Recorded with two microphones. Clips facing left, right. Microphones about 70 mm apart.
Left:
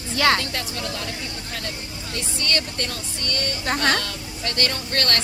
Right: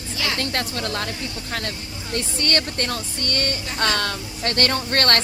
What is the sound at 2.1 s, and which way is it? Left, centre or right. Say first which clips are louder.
Speech: right 3 dB; right.